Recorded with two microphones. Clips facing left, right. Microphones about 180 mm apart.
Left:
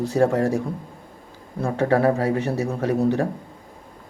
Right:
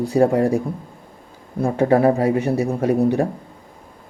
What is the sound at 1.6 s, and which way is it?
Speech, 20° right (ahead or behind).